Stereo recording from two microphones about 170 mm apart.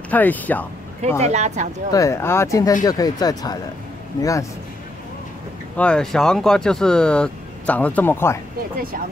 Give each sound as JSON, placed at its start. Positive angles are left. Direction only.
{"t": 0.1, "sound": "speech", "side_deg": 10}
{"t": 1.2, "sound": "speech", "side_deg": -40}
{"t": 1.9, "sound": "speech", "side_deg": 20}
{"t": 5.8, "sound": "speech", "side_deg": 5}